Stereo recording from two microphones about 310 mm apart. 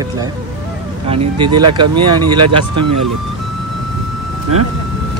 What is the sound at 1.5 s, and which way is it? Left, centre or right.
Speech, right.